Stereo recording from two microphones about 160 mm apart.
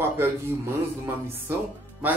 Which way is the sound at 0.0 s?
15° right (ahead or behind).